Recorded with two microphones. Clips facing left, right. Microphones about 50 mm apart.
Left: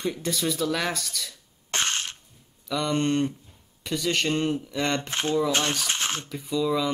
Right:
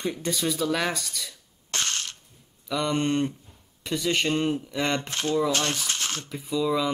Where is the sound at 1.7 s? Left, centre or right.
Left.